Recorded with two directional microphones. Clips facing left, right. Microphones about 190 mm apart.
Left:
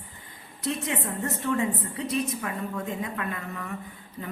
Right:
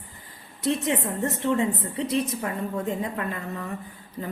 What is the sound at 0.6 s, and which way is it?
A woman's voice, 30° right (ahead or behind).